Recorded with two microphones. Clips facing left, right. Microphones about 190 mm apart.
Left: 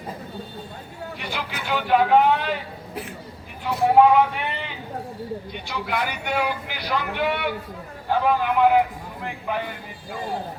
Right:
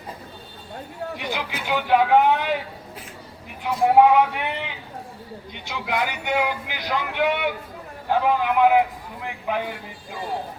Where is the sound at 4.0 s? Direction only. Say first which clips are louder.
Even; 15° right (ahead or behind).